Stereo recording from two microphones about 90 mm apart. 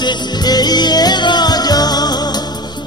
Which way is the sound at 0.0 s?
50° left (ahead or behind).